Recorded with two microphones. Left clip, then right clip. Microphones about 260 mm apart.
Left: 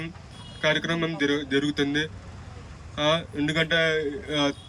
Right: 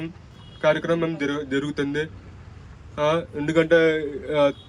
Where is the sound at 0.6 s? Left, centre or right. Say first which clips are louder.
Right 4 dB; centre.